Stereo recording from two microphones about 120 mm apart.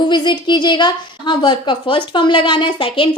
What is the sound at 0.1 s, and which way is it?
A woman's voice, 40° left (ahead or behind).